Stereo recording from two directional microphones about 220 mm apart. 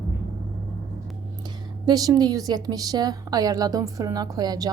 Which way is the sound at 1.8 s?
15° right (ahead or behind).